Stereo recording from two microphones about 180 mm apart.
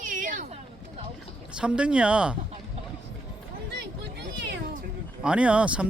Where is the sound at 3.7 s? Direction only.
70° right (ahead or behind).